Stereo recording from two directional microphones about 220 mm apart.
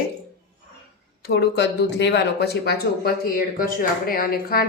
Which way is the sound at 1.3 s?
50° left (ahead or behind).